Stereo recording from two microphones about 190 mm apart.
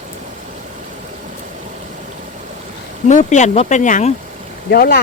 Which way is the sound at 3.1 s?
40° left (ahead or behind).